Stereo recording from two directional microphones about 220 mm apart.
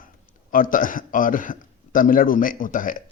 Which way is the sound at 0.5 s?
40° left (ahead or behind).